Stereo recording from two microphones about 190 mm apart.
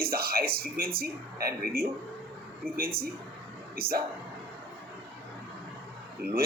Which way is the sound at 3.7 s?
55° right (ahead or behind).